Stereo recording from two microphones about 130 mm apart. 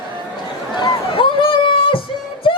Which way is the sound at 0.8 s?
40° left (ahead or behind).